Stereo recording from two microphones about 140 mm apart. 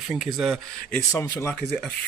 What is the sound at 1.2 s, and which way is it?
Speech, 15° left (ahead or behind).